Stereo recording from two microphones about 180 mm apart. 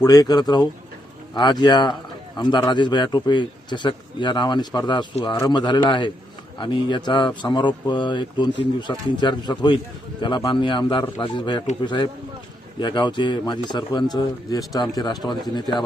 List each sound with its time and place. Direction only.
0.0 s a man's voice: 20° left (ahead or behind)
12.8 s a man's voice: 25° left (ahead or behind)